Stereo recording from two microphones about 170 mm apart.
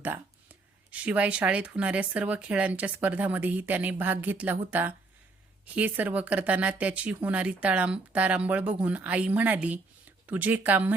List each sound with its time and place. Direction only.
0.9 s speech: 10° right (ahead or behind)